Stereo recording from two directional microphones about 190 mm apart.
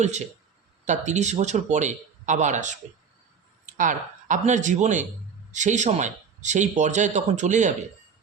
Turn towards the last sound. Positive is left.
turn(degrees=-40)  # may be behind; listen again after turning